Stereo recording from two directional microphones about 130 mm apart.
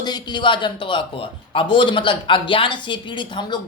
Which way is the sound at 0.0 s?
35° left (ahead or behind).